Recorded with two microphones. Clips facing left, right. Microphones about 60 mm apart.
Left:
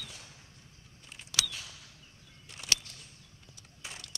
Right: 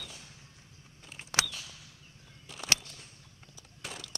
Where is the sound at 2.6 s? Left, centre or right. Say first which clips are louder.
Right 3 dB; right.